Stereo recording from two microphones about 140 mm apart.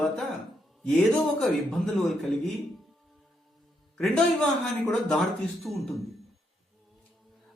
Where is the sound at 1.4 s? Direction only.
Centre (ahead or behind).